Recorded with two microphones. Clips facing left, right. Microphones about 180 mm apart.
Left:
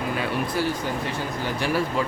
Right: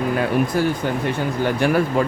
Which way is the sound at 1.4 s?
55° right (ahead or behind).